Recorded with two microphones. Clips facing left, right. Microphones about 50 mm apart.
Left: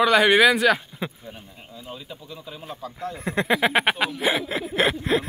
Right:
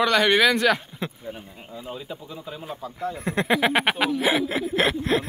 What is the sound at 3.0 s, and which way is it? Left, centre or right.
Speech, centre.